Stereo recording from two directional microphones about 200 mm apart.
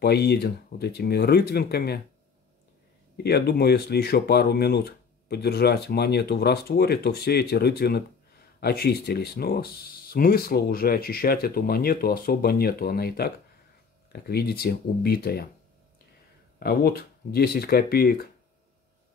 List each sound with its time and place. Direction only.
0.0 s speech: 55° left (ahead or behind)
3.3 s speech: 55° left (ahead or behind)
16.5 s speech: 50° left (ahead or behind)